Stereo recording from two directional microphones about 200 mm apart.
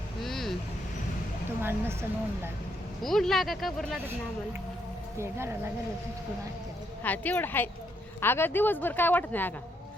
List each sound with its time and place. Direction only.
0.2 s vehicle: centre (ahead or behind)
1.6 s a woman's voice: 10° right (ahead or behind)
3.0 s speech: centre (ahead or behind)
5.1 s a woman's voice: 15° right (ahead or behind)
7.0 s speech: 10° left (ahead or behind)